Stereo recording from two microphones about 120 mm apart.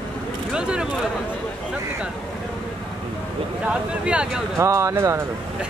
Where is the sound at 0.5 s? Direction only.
5° right (ahead or behind).